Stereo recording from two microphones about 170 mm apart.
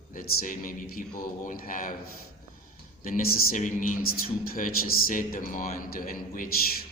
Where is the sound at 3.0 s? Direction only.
55° left (ahead or behind).